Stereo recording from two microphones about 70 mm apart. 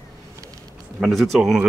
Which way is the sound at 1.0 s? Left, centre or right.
Centre.